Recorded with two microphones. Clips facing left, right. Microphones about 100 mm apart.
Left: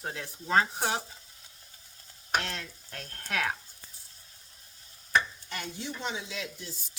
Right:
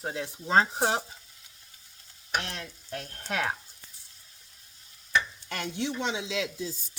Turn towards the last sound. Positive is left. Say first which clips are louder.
# right 5 dB
turn(degrees=-90)